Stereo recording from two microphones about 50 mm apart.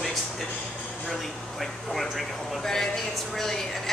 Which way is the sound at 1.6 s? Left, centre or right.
Centre.